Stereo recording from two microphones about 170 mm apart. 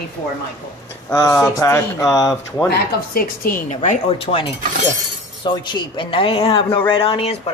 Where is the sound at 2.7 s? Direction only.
60° left (ahead or behind).